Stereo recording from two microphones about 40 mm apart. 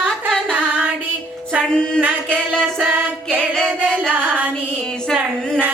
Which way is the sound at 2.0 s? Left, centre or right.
Right.